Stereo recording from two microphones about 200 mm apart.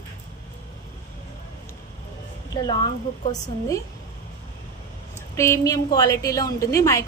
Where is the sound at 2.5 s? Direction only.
20° left (ahead or behind).